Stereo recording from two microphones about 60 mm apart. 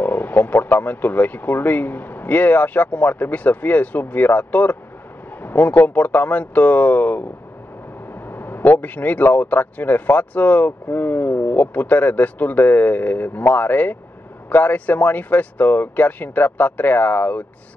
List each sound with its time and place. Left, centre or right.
0.0 s speech: left